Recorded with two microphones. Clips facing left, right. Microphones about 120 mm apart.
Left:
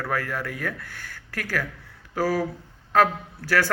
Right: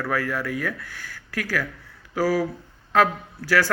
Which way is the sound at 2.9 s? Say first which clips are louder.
Even; 45° left (ahead or behind).